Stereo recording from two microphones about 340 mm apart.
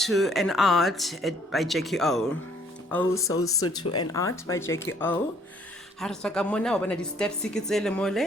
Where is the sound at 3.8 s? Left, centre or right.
Left.